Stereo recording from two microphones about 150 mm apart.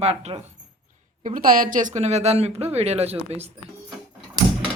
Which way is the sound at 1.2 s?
65° right (ahead or behind).